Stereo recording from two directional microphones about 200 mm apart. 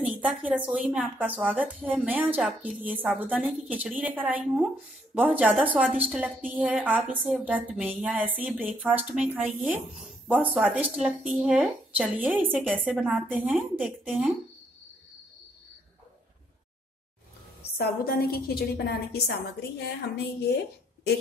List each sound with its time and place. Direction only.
0.0 s a woman's voice: 5° right (ahead or behind)
17.6 s a woman's voice: 50° left (ahead or behind)